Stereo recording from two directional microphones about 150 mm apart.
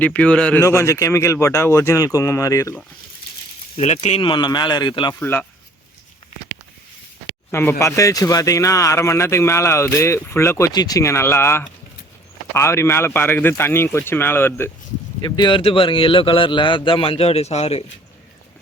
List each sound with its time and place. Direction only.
0.0 s speech: 10° left (ahead or behind)
0.6 s speech: 20° left (ahead or behind)
3.8 s speech: 45° left (ahead or behind); by 5.1 s 30° left (ahead or behind)
5.2 s speech: 15° left (ahead or behind)
7.5 s speech: 15° left (ahead or behind)
15.2 s speech: 30° left (ahead or behind)